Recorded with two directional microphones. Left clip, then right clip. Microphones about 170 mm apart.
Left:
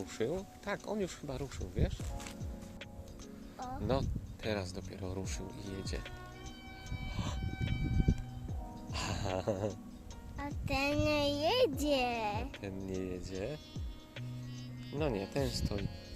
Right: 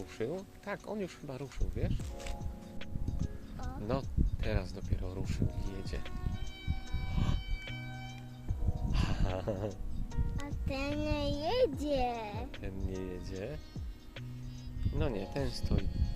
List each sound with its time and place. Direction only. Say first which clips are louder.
0.2 s speech: left 1 dB; 20° left (ahead or behind)
3.9 s speech: even; 15° left (ahead or behind)
8.9 s music: left 1 dB; 15° left (ahead or behind)
10.4 s a child's voice: left 4 dB; 55° left (ahead or behind)
12.6 s speech: left 1 dB; 15° left (ahead or behind)
14.9 s speech: left 2 dB; 20° left (ahead or behind)
15.7 s speech: right 1 dB; centre (ahead or behind)